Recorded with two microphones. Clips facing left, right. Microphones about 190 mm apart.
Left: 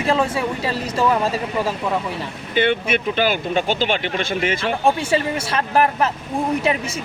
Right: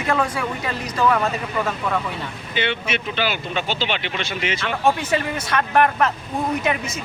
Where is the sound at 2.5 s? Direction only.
50° left (ahead or behind).